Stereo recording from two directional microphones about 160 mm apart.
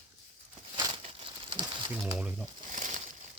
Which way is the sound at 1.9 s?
10° right (ahead or behind).